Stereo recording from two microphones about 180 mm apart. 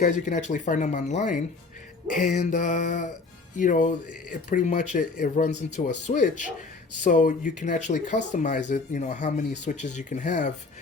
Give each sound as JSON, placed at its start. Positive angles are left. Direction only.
{"t": 0.0, "sound": "speech", "side_deg": 40}